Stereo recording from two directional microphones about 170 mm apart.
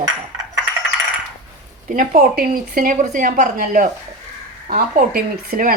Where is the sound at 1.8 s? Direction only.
50° right (ahead or behind).